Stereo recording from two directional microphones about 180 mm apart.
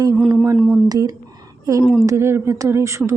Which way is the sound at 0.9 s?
20° right (ahead or behind).